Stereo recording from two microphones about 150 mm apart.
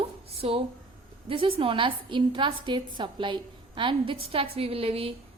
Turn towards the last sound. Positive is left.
turn(degrees=-40)  # may be behind; listen again after turning